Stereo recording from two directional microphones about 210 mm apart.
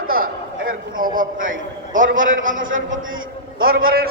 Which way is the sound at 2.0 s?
65° right (ahead or behind).